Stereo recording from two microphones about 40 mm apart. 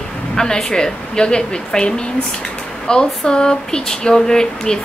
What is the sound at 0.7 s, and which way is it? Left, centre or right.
Speech, centre.